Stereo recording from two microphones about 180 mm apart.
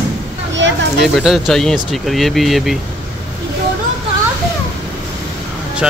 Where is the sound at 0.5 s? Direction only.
90° right.